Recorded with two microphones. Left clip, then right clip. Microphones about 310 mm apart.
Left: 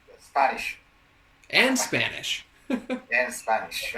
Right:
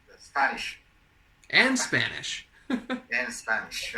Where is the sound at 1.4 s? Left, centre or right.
Centre.